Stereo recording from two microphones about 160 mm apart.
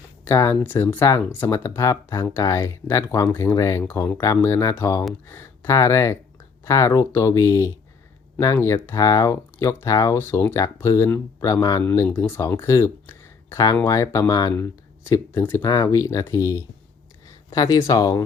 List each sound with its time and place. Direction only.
0.3 s speech: 15° left (ahead or behind)